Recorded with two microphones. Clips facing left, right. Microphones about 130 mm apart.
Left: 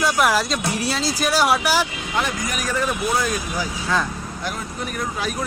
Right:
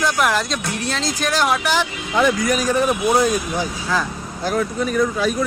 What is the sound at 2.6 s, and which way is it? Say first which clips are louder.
Speech: right 2 dB; 25° right (ahead or behind).